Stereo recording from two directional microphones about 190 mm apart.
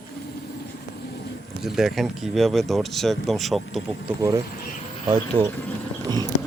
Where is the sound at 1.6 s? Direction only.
Centre (ahead or behind).